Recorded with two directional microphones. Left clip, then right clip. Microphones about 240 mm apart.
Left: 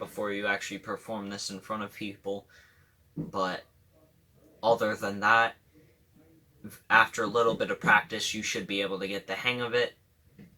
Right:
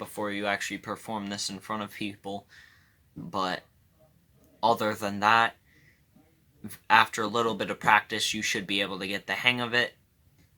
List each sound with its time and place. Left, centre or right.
0.2 s speech: right
4.6 s speech: right
6.7 s speech: right